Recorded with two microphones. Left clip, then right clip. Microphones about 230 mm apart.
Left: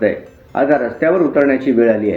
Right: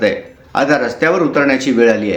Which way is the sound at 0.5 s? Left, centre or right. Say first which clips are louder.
Right 1 dB; centre.